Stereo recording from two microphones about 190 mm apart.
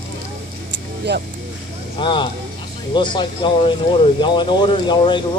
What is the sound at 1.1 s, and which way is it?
Speech, 60° right (ahead or behind).